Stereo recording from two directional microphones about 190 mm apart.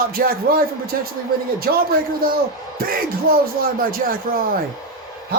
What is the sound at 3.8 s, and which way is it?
Speech, 50° right (ahead or behind).